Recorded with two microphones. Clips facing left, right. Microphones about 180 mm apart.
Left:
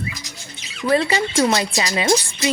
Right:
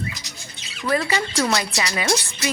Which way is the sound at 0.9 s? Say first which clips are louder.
Left 4 dB; 25° left (ahead or behind).